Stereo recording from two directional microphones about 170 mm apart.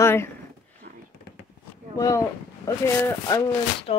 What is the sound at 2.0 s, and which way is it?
Speech, 20° left (ahead or behind).